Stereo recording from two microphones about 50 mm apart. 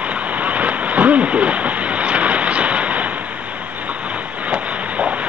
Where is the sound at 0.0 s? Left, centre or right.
Right.